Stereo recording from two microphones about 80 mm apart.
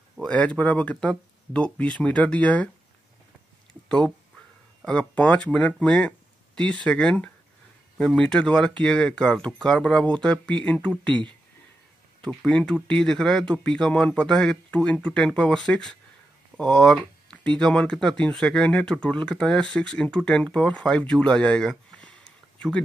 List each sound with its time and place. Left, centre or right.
0.2 s speech: centre
4.8 s speech: centre
12.4 s speech: centre